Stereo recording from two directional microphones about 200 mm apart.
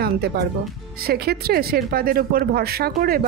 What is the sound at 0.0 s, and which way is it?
Speech, 50° right (ahead or behind).